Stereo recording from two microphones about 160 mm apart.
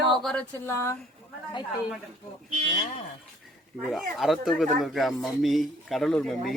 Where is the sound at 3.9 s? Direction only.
Centre (ahead or behind).